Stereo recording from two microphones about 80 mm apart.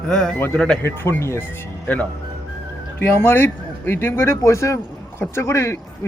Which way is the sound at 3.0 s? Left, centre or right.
Left.